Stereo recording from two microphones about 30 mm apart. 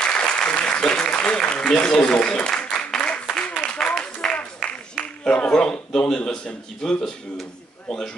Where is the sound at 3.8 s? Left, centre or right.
Left.